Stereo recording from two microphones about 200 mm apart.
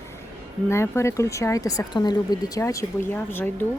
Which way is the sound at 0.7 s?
15° left (ahead or behind).